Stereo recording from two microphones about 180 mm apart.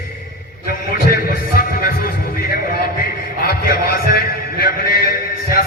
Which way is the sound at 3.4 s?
55° left (ahead or behind).